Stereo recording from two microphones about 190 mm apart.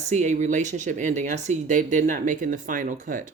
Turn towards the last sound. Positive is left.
turn(degrees=-45)  # may be behind; listen again after turning